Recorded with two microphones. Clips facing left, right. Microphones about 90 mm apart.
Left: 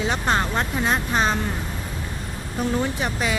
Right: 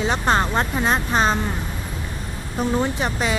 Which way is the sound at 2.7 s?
30° right (ahead or behind).